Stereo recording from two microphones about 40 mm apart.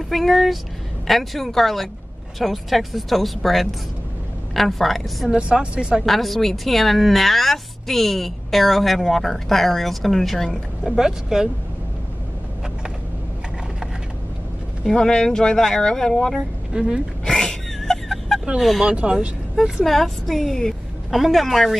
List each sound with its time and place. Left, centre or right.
0.1 s a woman's voice: centre
5.3 s a woman's voice: right
6.0 s a woman's voice: centre
11.0 s speech: centre
15.0 s speech: centre
16.7 s a woman's voice: centre
17.3 s a sound: centre
18.6 s a woman's voice: centre
18.9 s a woman's voice: right
19.8 s a woman's voice: centre